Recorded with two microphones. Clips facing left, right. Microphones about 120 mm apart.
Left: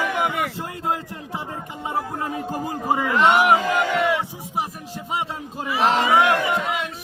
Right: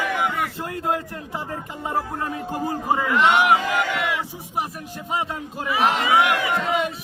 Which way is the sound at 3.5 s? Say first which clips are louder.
Left 1 dB; 40° left (ahead or behind).